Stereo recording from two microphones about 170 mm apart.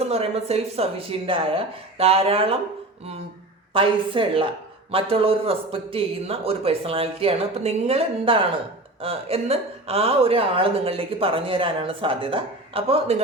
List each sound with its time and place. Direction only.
0.0 s speech: 35° right (ahead or behind)
3.7 s speech: 30° right (ahead or behind)